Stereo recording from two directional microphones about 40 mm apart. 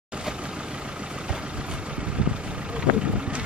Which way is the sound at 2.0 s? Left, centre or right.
Right.